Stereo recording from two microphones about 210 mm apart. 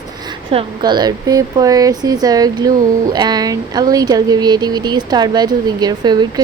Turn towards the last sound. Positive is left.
turn(degrees=-20)  # may be behind; listen again after turning